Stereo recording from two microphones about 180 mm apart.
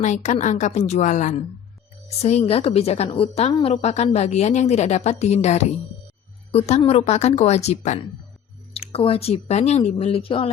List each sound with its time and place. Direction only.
0.0 s a woman's voice: 40° left (ahead or behind)